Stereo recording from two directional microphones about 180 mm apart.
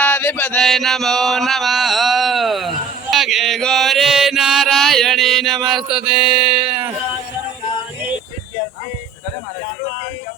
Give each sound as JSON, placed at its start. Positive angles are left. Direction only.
{"t": 0.0, "sound": "chant", "side_deg": 10}
{"t": 5.6, "sound": "mantra", "side_deg": 0}